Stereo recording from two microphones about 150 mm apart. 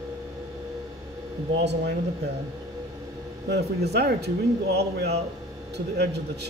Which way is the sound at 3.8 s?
90° right.